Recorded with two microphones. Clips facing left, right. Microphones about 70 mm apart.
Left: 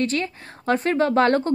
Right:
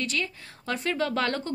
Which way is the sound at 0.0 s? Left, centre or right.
Left.